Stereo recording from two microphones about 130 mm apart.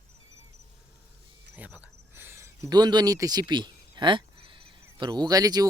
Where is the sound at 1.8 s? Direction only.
15° right (ahead or behind).